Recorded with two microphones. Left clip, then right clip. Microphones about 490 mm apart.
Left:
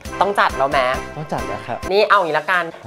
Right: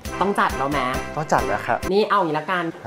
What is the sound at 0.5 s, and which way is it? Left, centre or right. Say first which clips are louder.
Speech: left 5 dB; centre.